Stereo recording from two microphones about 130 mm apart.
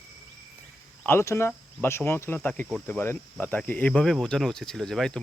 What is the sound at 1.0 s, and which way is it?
Speech, 20° left (ahead or behind).